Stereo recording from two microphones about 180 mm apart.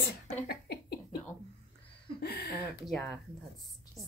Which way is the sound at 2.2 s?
65° left (ahead or behind).